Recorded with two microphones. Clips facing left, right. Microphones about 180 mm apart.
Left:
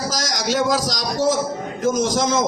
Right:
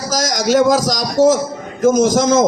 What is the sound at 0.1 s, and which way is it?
A man's voice, 45° right (ahead or behind).